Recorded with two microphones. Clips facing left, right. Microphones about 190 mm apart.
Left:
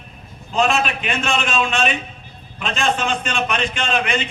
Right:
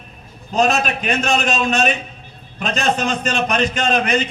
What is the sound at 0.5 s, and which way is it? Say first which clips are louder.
A man's voice: right 2 dB; 40° right (ahead or behind).